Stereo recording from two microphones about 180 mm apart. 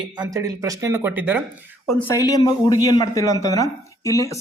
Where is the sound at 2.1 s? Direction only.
20° left (ahead or behind).